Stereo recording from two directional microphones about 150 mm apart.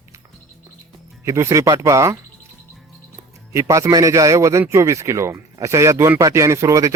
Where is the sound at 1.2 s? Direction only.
20° right (ahead or behind).